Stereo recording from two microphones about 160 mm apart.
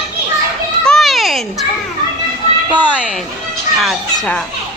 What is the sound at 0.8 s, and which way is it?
Children playing, centre (ahead or behind).